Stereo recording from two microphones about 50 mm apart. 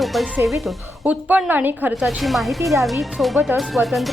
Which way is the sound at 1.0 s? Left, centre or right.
Right.